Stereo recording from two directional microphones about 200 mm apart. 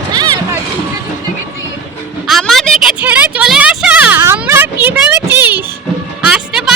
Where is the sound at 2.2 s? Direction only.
Centre (ahead or behind).